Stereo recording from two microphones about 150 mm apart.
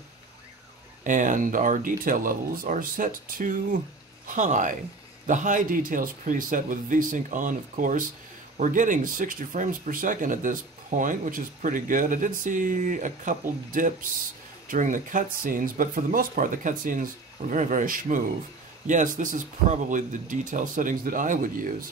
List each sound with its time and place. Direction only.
1.0 s speech: 55° right (ahead or behind)